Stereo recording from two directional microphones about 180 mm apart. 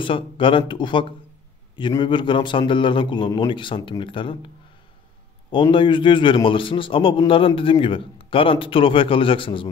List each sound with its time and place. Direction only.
0.0 s a man's voice: 30° left (ahead or behind)
5.5 s a man's voice: 25° left (ahead or behind)